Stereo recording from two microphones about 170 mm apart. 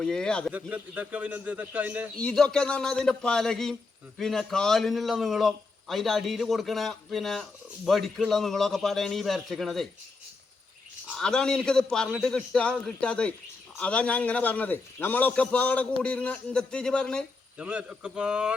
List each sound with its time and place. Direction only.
0.0 s a man's voice: 5° left (ahead or behind)
0.7 s a man's voice: 10° right (ahead or behind)
2.1 s a man's voice: 5° left (ahead or behind)
11.2 s a man's voice: 5° left (ahead or behind)
17.6 s a man's voice: 5° right (ahead or behind)